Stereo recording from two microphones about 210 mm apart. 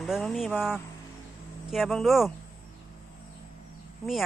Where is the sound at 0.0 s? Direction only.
Centre (ahead or behind).